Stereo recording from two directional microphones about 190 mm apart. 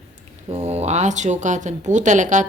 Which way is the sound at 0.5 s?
35° right (ahead or behind).